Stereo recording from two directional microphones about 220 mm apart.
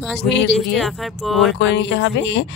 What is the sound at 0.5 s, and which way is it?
Speech, centre (ahead or behind).